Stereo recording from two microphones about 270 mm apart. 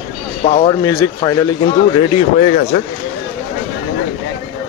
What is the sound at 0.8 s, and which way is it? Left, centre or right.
Speech, centre.